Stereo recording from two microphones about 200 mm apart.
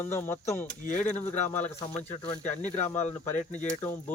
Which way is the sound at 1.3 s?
35° left (ahead or behind).